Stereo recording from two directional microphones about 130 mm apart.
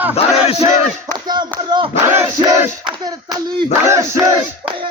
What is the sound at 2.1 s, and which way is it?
Battle cry, 20° right (ahead or behind).